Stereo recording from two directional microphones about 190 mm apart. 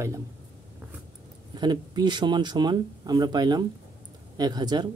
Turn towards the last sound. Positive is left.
turn(degrees=-20)  # may be behind; listen again after turning